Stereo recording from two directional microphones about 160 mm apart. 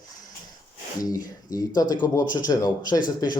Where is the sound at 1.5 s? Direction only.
25° left (ahead or behind).